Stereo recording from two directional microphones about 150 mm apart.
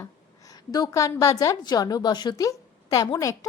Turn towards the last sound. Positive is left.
turn(degrees=25)  # may be behind; listen again after turning